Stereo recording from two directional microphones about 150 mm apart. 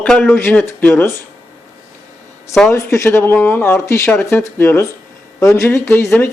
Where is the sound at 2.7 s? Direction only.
20° left (ahead or behind).